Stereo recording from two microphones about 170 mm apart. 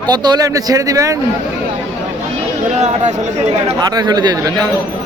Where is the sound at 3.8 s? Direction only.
25° right (ahead or behind).